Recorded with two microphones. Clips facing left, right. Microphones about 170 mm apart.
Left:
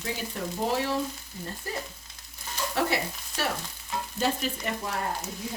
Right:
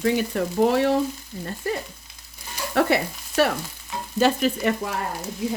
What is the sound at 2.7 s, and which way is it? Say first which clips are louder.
Stir: right 8 dB; 60° right (ahead or behind).